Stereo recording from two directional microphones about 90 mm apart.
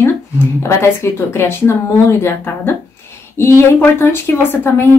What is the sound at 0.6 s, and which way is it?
Speech, 30° left (ahead or behind).